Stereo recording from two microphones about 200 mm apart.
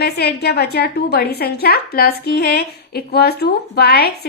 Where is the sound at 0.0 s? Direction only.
55° left (ahead or behind).